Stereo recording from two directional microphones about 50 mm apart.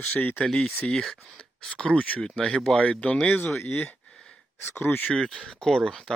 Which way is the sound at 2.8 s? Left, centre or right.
Left.